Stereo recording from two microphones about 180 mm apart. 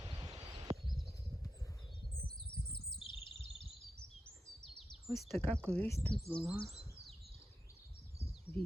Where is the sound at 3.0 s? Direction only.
25° left (ahead or behind).